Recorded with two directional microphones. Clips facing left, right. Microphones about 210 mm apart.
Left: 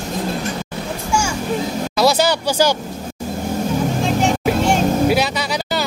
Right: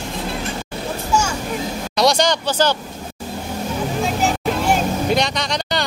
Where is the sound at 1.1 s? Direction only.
10° left (ahead or behind).